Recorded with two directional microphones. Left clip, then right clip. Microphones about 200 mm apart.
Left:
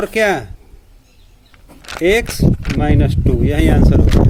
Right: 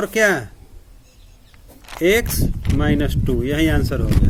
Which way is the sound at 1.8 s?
45° left (ahead or behind).